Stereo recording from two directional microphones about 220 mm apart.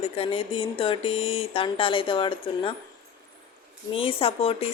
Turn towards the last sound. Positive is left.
turn(degrees=25)  # may be behind; listen again after turning